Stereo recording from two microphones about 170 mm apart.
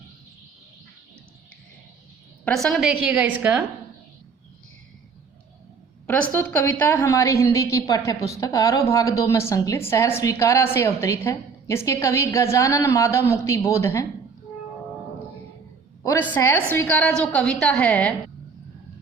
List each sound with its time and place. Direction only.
2.4 s a woman's voice: 5° left (ahead or behind)
6.3 s a woman's voice: 15° left (ahead or behind)
16.0 s a woman's voice: 15° left (ahead or behind)